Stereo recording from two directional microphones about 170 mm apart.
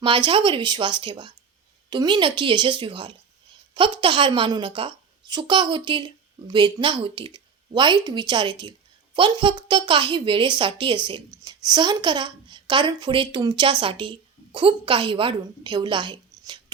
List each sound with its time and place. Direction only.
0.0 s a woman's voice: 30° right (ahead or behind)